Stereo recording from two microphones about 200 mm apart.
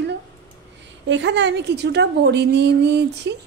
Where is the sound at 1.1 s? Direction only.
60° right (ahead or behind).